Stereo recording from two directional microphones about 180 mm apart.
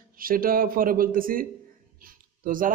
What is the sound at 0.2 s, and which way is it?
A man's voice, 50° right (ahead or behind).